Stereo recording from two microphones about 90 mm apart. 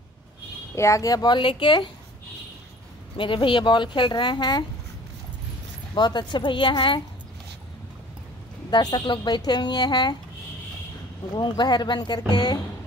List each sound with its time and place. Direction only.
0.7 s a woman's voice: 35° left (ahead or behind); by 1.9 s 65° left (ahead or behind)
3.2 s a woman's voice: 70° left (ahead or behind)
5.9 s a woman's voice: 55° left (ahead or behind)
8.6 s a woman's voice: 55° left (ahead or behind)
11.3 s a woman's voice: 55° left (ahead or behind)